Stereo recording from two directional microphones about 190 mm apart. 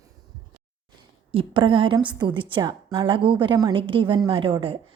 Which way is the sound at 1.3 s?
25° right (ahead or behind).